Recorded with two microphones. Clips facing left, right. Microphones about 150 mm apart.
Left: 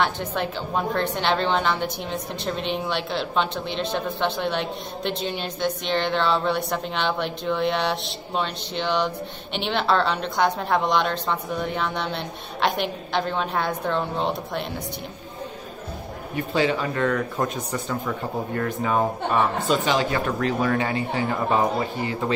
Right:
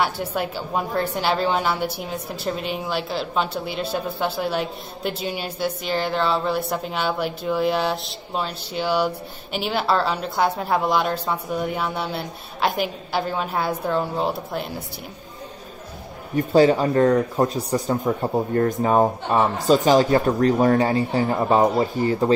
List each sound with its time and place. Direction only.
0.0 s a woman's voice: 10° right (ahead or behind)
16.3 s speech: 40° right (ahead or behind)